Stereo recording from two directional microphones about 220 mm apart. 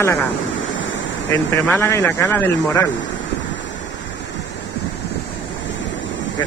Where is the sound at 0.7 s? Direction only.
60° left (ahead or behind).